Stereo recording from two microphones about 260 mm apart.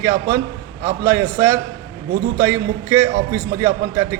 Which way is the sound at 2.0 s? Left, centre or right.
Right.